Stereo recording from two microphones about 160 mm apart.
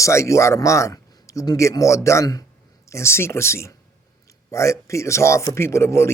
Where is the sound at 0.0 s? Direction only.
20° left (ahead or behind).